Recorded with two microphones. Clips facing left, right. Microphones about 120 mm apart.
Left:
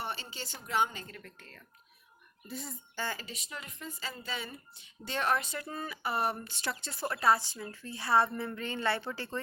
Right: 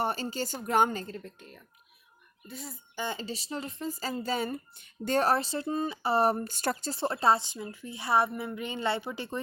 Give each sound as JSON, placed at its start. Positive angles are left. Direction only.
{"t": 0.0, "sound": "a woman's voice", "side_deg": -45}
{"t": 1.0, "sound": "a woman's voice", "side_deg": -25}
{"t": 2.5, "sound": "a child's voice", "side_deg": 0}
{"t": 2.9, "sound": "speech", "side_deg": -20}
{"t": 6.5, "sound": "a woman's voice", "side_deg": -45}
{"t": 6.9, "sound": "a woman's voice", "side_deg": -25}